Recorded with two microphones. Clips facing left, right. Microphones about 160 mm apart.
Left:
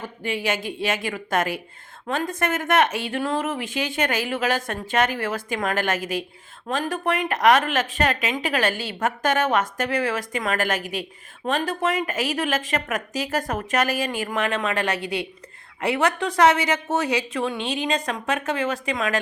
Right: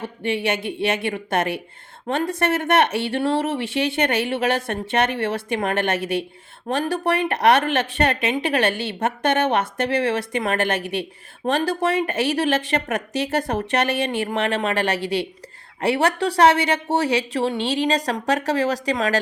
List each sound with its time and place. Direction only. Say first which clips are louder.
0.0 s speech: right 3 dB; 30° right (ahead or behind)